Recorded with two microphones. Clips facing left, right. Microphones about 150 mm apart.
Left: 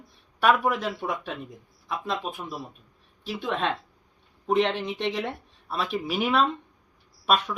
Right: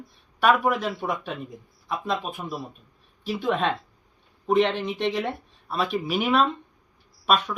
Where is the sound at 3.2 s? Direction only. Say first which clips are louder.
Right 3 dB; 5° right (ahead or behind).